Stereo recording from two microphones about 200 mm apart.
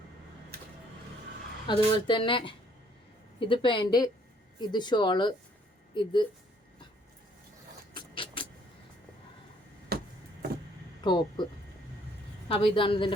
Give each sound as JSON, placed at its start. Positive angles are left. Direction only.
{"t": 1.6, "sound": "speech", "side_deg": 25}
{"t": 7.9, "sound": "vehicle", "side_deg": 25}
{"t": 9.9, "sound": "a sound", "side_deg": -50}
{"t": 11.0, "sound": "speech", "side_deg": 25}
{"t": 12.5, "sound": "speech", "side_deg": 25}